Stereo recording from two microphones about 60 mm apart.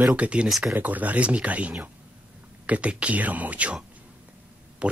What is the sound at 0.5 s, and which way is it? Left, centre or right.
Speech, centre.